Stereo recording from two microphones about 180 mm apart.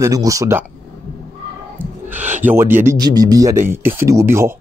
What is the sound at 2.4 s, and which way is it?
Speech, 10° right (ahead or behind).